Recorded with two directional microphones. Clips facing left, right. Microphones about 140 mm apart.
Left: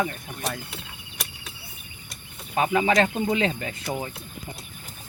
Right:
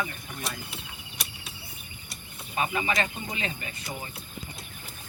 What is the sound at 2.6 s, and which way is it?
Speech, 75° left (ahead or behind).